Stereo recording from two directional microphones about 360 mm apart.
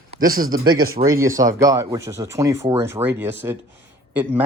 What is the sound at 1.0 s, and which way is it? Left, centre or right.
Speech, centre.